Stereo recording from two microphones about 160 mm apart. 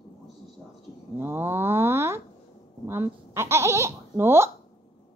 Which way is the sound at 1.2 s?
15° right (ahead or behind).